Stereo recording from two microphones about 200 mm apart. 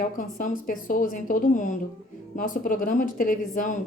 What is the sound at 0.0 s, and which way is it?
Speech, 40° left (ahead or behind).